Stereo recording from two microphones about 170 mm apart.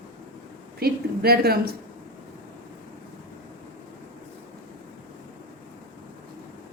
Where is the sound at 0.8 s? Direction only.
65° right (ahead or behind).